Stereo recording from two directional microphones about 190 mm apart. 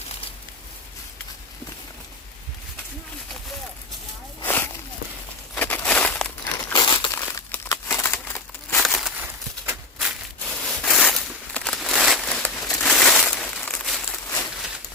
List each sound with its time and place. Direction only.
4.4 s walk: 10° left (ahead or behind)
5.5 s crumpling: 10° left (ahead or behind)
6.7 s crumpling: 25° left (ahead or behind)
8.8 s a sound: centre (ahead or behind)
12.8 s crumpling: centre (ahead or behind)